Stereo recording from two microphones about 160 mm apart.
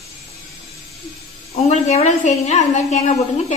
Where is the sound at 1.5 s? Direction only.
40° left (ahead or behind).